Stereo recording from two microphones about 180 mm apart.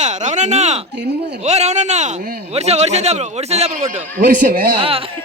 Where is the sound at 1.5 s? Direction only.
40° right (ahead or behind).